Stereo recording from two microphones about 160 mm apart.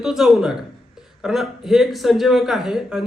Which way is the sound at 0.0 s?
Centre (ahead or behind).